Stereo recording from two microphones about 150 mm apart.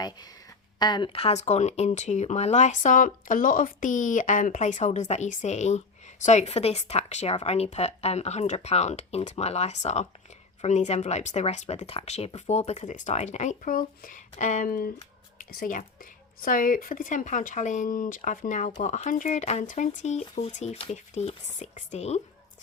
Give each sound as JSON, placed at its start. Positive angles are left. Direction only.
{"t": 0.8, "sound": "speech", "side_deg": 30}